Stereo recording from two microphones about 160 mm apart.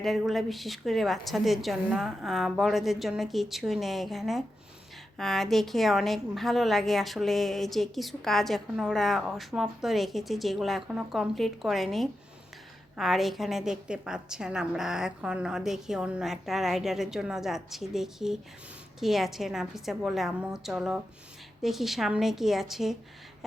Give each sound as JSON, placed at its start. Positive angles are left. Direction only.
{"t": 0.0, "sound": "a woman's voice", "side_deg": 0}